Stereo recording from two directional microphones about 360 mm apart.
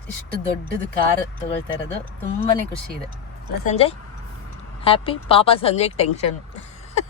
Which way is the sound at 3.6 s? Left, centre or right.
Centre.